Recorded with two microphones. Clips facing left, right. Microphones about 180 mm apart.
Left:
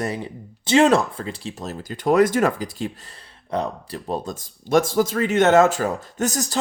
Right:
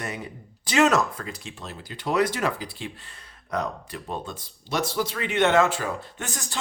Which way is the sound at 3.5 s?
30° left (ahead or behind).